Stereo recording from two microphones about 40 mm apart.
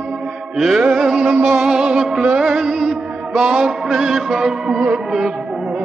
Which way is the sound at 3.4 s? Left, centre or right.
Right.